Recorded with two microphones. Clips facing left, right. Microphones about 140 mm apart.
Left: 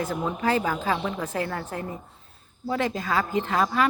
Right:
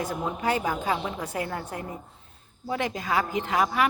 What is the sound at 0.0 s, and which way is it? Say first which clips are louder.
A man's voice: left 2 dB; 15° right (ahead or behind).